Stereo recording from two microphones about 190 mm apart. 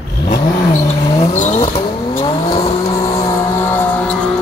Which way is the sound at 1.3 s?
35° left (ahead or behind).